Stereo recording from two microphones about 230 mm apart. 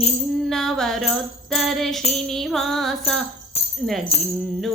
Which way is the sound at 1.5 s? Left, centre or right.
Centre.